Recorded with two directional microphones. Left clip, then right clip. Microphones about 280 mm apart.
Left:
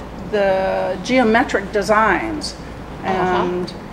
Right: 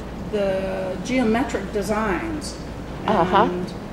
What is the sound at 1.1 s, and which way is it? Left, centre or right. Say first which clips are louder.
A woman's voice: left 7 dB; centre.